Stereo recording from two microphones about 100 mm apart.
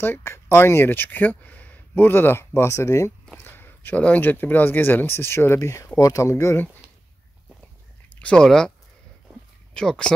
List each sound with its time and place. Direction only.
0.0 s speech: 25° left (ahead or behind)
8.2 s speech: 10° left (ahead or behind)
9.8 s speech: 10° left (ahead or behind)